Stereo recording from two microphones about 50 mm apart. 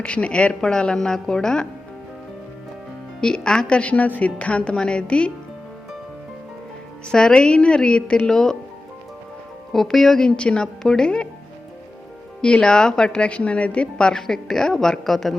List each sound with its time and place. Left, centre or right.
0.0 s a woman's voice: left
3.2 s a woman's voice: centre
7.1 s a woman's voice: centre
9.7 s speech: centre
10.2 s a woman's voice: left
12.4 s a woman's voice: left
14.1 s a woman's voice: centre